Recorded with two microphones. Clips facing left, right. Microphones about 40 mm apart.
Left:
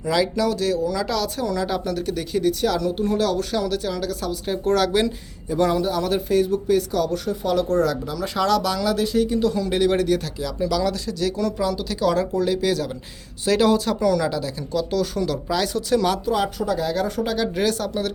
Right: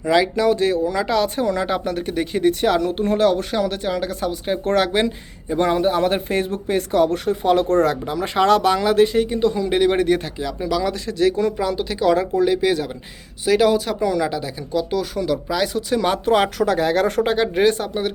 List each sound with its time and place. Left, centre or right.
0.0 s speech: right
11.0 s speech: right
13.4 s speech: centre
16.2 s speech: right
17.2 s speech: right